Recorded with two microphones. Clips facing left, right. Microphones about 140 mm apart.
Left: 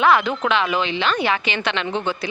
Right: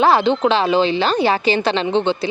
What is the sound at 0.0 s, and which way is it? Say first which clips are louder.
A woman's voice: right 4 dB; 30° right (ahead or behind).